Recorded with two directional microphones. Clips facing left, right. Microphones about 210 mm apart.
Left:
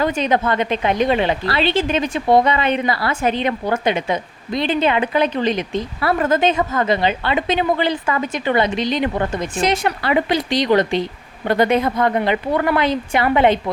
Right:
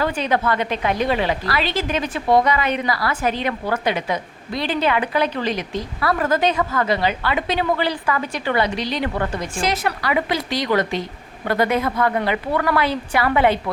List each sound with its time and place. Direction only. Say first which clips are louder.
0.0 s a woman's voice: left 2 dB; 20° left (ahead or behind)